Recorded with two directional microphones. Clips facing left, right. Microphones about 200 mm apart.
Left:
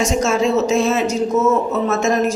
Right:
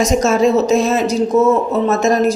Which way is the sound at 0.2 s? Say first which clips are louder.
Right 3 dB; 40° right (ahead or behind).